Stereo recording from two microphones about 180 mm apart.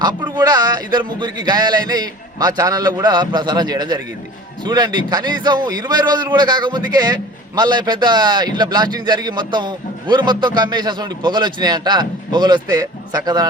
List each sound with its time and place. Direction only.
0.0 s a man's voice: 25° right (ahead or behind)